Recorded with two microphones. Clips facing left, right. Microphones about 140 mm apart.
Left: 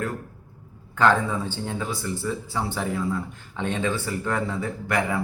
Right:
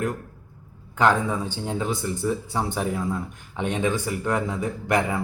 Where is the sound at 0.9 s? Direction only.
15° right (ahead or behind).